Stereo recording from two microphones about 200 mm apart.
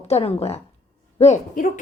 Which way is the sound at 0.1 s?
30° left (ahead or behind).